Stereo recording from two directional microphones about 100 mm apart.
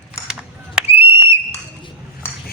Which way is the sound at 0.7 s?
20° right (ahead or behind).